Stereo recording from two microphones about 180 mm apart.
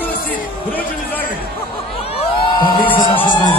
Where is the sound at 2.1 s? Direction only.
30° left (ahead or behind).